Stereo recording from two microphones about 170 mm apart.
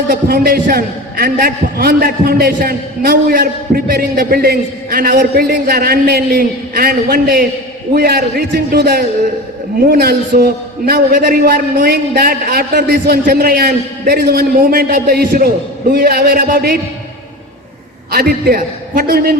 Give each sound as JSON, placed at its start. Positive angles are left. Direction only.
{"t": 0.1, "sound": "a man's voice", "side_deg": -60}
{"t": 18.1, "sound": "a man's voice", "side_deg": -60}